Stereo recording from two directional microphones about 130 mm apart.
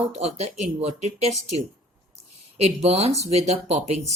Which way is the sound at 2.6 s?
55° right (ahead or behind).